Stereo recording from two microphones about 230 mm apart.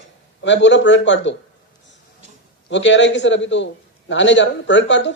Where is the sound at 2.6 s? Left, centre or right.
Left.